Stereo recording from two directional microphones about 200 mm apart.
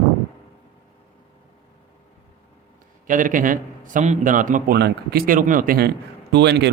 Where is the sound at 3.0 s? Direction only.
40° right (ahead or behind).